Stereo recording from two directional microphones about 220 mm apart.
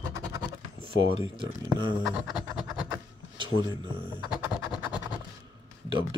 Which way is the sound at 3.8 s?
20° right (ahead or behind).